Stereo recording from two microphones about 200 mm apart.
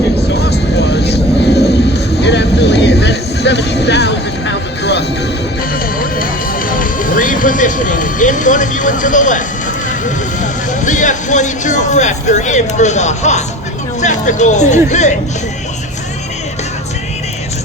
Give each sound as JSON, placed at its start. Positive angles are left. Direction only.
{"t": 0.5, "sound": "vehicle", "side_deg": 55}
{"t": 6.7, "sound": "music", "side_deg": 45}
{"t": 10.4, "sound": "speech", "side_deg": 40}